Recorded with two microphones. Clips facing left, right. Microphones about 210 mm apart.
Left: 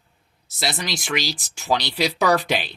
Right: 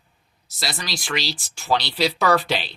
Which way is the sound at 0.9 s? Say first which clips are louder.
Left 2 dB; 20° left (ahead or behind).